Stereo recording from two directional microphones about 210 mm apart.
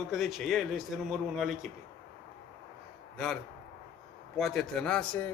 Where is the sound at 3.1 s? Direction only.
5° left (ahead or behind).